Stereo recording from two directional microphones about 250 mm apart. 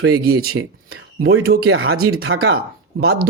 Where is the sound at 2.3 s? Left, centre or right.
Right.